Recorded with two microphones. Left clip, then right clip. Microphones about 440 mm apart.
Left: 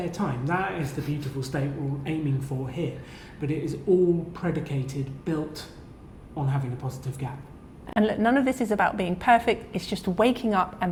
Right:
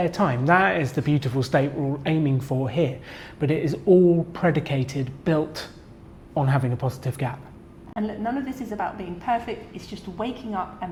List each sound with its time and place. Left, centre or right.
0.0 s a woman's voice: right
7.9 s a woman's voice: left